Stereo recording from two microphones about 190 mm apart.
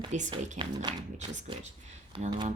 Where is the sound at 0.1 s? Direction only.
40° right (ahead or behind).